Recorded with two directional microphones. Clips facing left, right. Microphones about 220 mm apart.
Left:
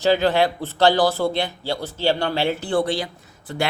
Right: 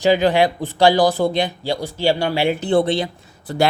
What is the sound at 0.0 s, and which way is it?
Speech, 15° right (ahead or behind).